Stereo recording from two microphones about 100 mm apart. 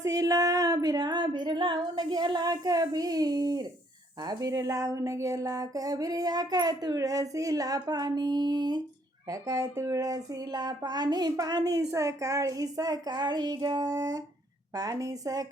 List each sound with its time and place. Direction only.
0.0 s speech: 35° right (ahead or behind)